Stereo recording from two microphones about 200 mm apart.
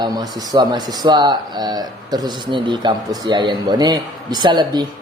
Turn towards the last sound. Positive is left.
turn(degrees=-20)  # may be behind; listen again after turning